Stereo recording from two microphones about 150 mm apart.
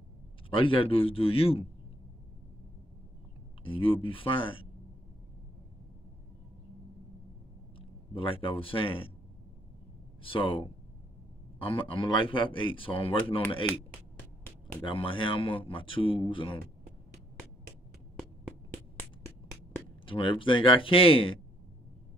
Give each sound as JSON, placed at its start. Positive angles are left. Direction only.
{"t": 0.5, "sound": "a man's voice", "side_deg": 35}
{"t": 3.6, "sound": "a man's voice", "side_deg": 35}
{"t": 7.8, "sound": "speech", "side_deg": 35}
{"t": 10.2, "sound": "a man's voice", "side_deg": 35}
{"t": 18.9, "sound": "music", "side_deg": 15}
{"t": 20.1, "sound": "a man's voice", "side_deg": 35}